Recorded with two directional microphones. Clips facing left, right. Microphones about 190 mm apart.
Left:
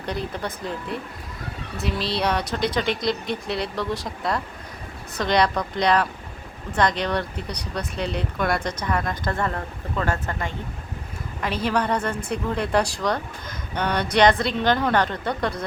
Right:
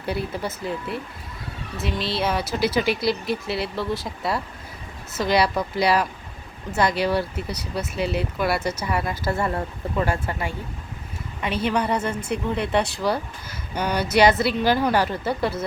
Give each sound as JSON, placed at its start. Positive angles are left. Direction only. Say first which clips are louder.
{"t": 0.0, "sound": "speech", "louder": "right 1 dB", "side_deg": -5}
{"t": 11.6, "sound": "speech", "louder": "even", "side_deg": -5}